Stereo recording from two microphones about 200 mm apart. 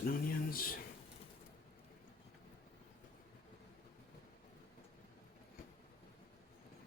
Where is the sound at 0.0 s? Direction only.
45° left (ahead or behind).